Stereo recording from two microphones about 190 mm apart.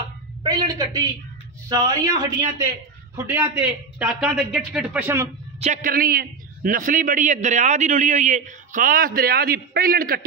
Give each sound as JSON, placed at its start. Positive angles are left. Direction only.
{"t": 0.4, "sound": "a sound", "side_deg": -25}
{"t": 1.7, "sound": "speech", "side_deg": -20}
{"t": 3.3, "sound": "a man's voice", "side_deg": -10}
{"t": 5.6, "sound": "a man's voice", "side_deg": -40}